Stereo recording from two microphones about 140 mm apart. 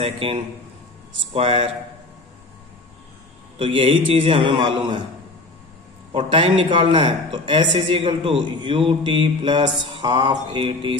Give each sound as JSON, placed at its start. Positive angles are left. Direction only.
{"t": 0.0, "sound": "a man's voice", "side_deg": -40}
{"t": 3.5, "sound": "a man's voice", "side_deg": -40}
{"t": 6.3, "sound": "a man's voice", "side_deg": -40}